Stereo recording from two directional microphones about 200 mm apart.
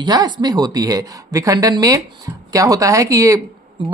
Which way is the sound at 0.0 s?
20° right (ahead or behind).